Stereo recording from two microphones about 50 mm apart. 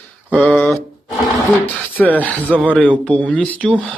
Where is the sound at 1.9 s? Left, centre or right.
Left.